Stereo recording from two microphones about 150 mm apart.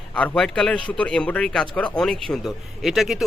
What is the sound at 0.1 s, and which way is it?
Speech, 10° left (ahead or behind).